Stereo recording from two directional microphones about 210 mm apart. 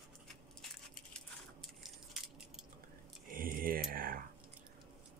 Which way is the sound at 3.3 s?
40° right (ahead or behind).